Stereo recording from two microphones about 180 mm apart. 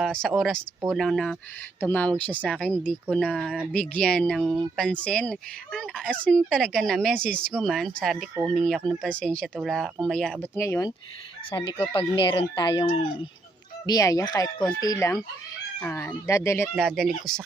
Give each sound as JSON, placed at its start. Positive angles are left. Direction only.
{"t": 0.0, "sound": "speech", "side_deg": 0}
{"t": 10.5, "sound": "speech", "side_deg": 15}
{"t": 11.9, "sound": "speech", "side_deg": 30}
{"t": 13.8, "sound": "speech", "side_deg": 20}
{"t": 16.7, "sound": "speech", "side_deg": 0}